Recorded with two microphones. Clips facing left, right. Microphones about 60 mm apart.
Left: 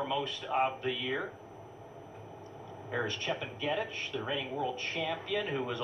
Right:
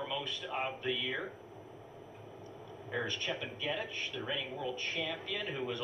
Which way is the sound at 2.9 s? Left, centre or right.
Left.